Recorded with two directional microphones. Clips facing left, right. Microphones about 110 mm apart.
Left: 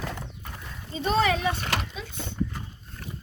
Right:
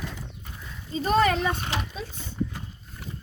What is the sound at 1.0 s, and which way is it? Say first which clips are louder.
Speech: right 2 dB; 45° right (ahead or behind).